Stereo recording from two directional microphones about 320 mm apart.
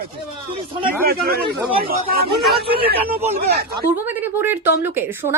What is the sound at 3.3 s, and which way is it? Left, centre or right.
Speech, right.